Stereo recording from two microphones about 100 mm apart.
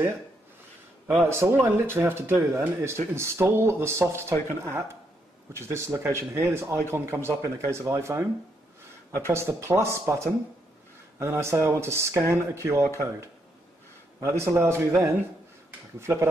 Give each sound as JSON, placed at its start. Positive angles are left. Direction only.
{"t": 1.0, "sound": "speech", "side_deg": -20}
{"t": 9.3, "sound": "speech", "side_deg": -25}